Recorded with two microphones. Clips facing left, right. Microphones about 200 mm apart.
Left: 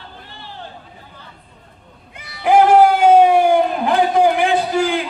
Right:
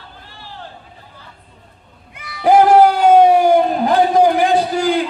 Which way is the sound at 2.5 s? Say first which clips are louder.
Right 2 dB; 40° right (ahead or behind).